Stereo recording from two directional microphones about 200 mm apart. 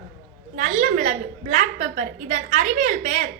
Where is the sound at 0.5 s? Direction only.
35° right (ahead or behind).